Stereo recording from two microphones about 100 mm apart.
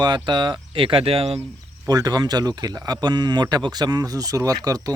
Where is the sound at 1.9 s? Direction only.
40° right (ahead or behind).